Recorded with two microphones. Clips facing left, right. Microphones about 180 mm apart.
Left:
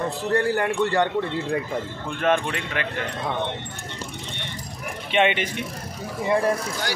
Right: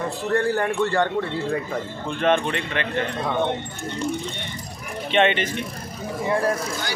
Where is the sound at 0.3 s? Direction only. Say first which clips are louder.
Right 1 dB; 15° left (ahead or behind).